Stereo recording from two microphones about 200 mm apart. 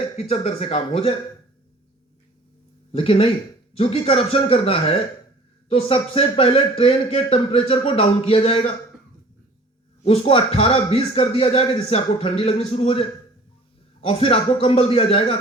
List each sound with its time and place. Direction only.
0.2 s speech: 30° left (ahead or behind)
2.9 s speech: 30° left (ahead or behind)
10.0 s speech: 30° left (ahead or behind)